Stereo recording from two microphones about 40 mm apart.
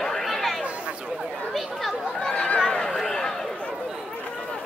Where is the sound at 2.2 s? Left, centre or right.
Left.